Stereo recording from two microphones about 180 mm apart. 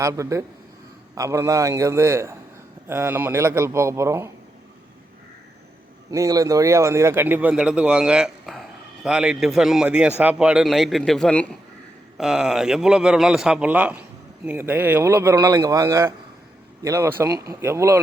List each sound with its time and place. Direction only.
0.0 s speech: 15° right (ahead or behind)
6.1 s a man's voice: 20° right (ahead or behind)